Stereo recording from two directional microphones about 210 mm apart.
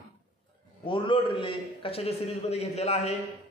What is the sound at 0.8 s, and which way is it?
A man's voice, 25° left (ahead or behind).